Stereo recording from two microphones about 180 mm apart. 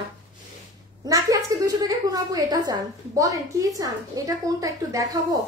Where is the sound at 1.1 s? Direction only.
20° right (ahead or behind).